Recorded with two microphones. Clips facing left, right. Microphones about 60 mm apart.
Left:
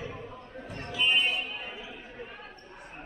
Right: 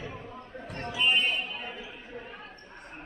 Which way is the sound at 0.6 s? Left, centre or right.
Right.